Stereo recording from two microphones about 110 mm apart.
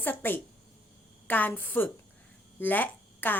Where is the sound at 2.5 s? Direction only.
15° left (ahead or behind).